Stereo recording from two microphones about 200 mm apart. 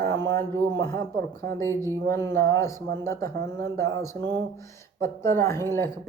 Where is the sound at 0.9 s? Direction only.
15° left (ahead or behind).